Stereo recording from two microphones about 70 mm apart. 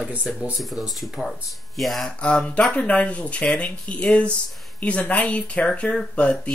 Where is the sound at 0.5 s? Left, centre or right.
Centre.